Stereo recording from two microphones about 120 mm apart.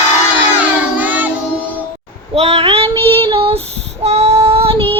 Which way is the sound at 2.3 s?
60° right (ahead or behind).